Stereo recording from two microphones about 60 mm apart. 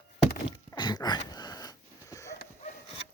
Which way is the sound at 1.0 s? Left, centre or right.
Left.